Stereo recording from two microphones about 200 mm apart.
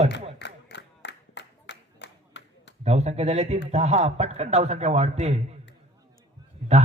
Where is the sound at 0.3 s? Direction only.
60° left (ahead or behind).